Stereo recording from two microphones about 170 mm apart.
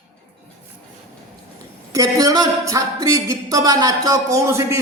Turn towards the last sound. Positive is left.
turn(degrees=-15)  # may be behind; listen again after turning